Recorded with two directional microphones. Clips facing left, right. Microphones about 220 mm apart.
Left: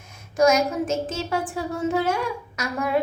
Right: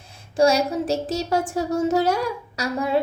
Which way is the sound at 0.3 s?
35° right (ahead or behind).